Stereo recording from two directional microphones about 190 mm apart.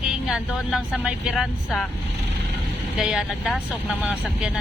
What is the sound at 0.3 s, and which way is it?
Speech, 5° right (ahead or behind).